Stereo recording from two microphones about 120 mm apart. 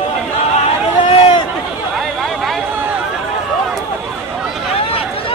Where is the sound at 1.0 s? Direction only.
40° left (ahead or behind).